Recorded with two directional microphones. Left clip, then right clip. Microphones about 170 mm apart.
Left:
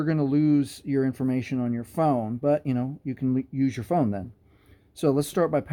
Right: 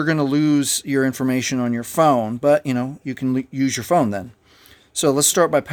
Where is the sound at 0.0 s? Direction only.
25° right (ahead or behind).